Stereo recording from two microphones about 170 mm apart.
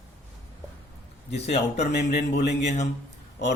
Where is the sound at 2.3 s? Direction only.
90° left.